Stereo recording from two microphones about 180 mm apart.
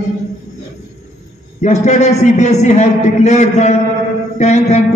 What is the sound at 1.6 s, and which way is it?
A man's voice, 40° left (ahead or behind).